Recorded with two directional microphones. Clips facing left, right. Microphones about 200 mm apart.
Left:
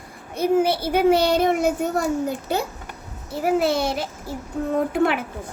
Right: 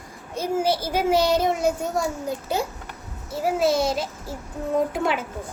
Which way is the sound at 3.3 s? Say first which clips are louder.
Left 1 dB; 60° left (ahead or behind).